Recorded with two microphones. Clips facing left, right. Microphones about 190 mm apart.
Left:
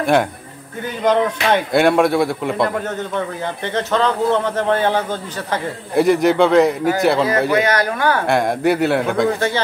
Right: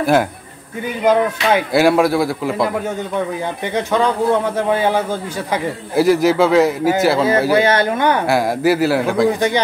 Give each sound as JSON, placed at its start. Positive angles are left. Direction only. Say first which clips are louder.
{"t": 0.0, "sound": "a man's voice", "louder": "right 1 dB", "side_deg": 0}
{"t": 7.5, "sound": "speech", "louder": "right 3 dB", "side_deg": -25}
{"t": 8.3, "sound": "a man's voice", "louder": "right 1 dB", "side_deg": -5}
{"t": 9.3, "sound": "a man's voice", "louder": "right 2 dB", "side_deg": -15}